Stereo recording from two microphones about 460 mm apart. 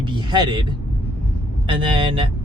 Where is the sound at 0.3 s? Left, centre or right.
Centre.